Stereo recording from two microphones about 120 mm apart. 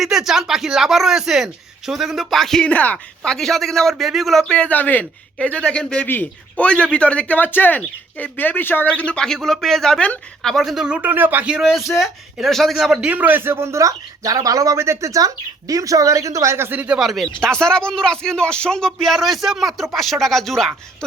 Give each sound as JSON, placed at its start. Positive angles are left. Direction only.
{"t": 0.0, "sound": "a man's voice", "side_deg": 0}